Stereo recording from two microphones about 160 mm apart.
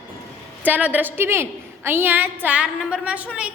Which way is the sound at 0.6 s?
10° right (ahead or behind).